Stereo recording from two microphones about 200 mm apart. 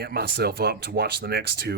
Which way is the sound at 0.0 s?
50° right (ahead or behind).